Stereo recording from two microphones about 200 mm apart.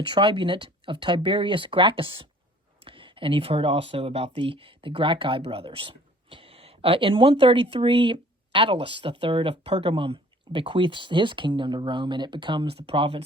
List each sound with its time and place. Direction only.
0.0 s speech: 25° right (ahead or behind)